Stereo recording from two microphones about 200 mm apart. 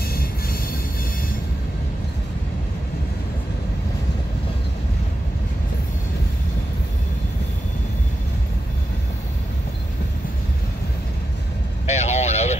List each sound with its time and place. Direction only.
0.0 s train: 50° left (ahead or behind)
11.8 s vehicle: 35° left (ahead or behind)